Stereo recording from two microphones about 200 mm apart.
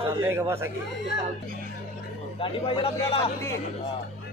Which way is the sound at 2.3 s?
25° left (ahead or behind).